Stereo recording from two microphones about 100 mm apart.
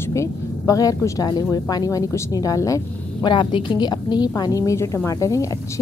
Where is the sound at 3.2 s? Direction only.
50° left (ahead or behind).